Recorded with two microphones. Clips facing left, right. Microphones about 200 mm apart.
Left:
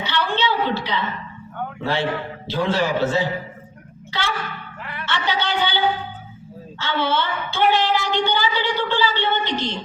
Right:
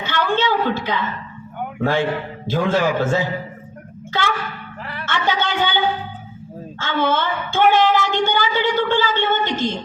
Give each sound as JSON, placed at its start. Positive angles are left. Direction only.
{"t": 0.0, "sound": "a sound", "side_deg": -50}
{"t": 1.8, "sound": "a woman's voice", "side_deg": -50}
{"t": 4.9, "sound": "music", "side_deg": -40}
{"t": 6.7, "sound": "a woman's voice", "side_deg": -50}